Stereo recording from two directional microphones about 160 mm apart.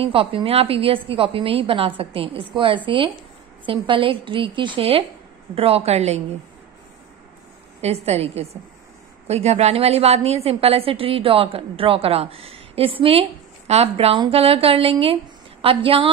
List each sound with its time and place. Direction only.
0.0 s a woman's voice: 35° right (ahead or behind)
7.8 s a woman's voice: 40° right (ahead or behind)